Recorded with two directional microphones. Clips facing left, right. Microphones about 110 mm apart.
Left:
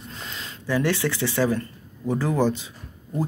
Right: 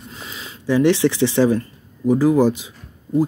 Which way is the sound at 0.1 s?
5° right (ahead or behind).